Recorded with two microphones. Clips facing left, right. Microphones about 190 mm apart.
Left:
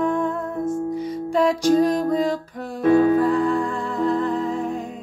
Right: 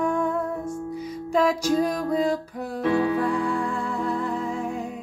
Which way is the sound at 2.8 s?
50° left (ahead or behind).